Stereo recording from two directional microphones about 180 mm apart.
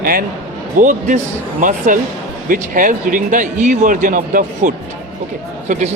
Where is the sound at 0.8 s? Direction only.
45° right (ahead or behind).